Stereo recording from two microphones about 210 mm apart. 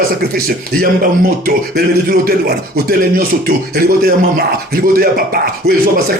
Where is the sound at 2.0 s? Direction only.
45° right (ahead or behind).